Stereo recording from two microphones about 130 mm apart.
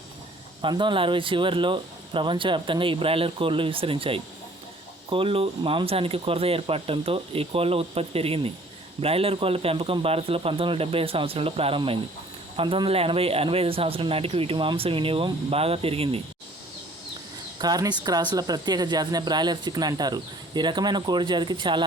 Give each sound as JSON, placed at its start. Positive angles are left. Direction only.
{"t": 0.6, "sound": "a man's voice", "side_deg": -40}
{"t": 17.6, "sound": "speech", "side_deg": -30}